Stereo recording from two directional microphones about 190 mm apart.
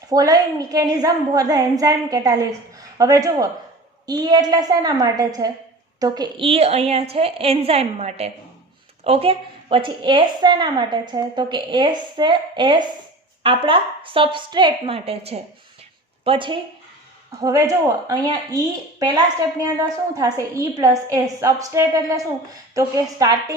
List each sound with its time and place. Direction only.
0.1 s a woman's voice: 20° right (ahead or behind)